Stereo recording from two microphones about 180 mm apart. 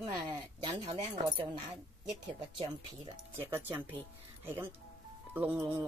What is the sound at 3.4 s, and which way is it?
Speech, 10° right (ahead or behind).